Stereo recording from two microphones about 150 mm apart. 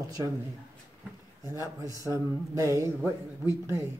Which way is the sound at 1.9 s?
20° right (ahead or behind).